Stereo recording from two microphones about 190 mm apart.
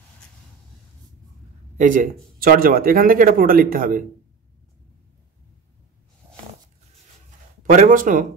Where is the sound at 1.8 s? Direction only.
45° right (ahead or behind).